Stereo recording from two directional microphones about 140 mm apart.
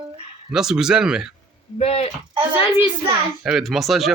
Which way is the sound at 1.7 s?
45° left (ahead or behind).